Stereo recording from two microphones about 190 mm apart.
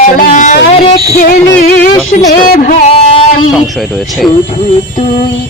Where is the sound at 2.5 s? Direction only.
40° left (ahead or behind).